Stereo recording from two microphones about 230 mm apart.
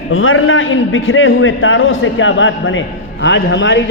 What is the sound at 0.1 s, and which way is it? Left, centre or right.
A man's voice, left.